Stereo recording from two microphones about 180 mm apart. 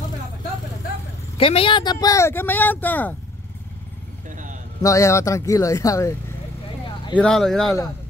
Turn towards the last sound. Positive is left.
turn(degrees=0)  # may be behind; listen again after turning